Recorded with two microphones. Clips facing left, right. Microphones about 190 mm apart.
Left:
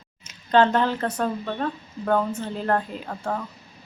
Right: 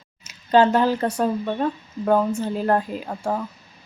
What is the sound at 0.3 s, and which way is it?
Speech, 10° right (ahead or behind).